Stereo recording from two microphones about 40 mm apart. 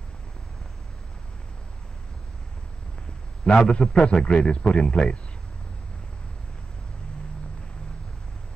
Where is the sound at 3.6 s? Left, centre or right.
Left.